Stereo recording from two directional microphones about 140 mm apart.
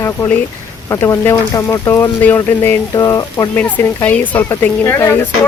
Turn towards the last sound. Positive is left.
turn(degrees=15)  # may be behind; listen again after turning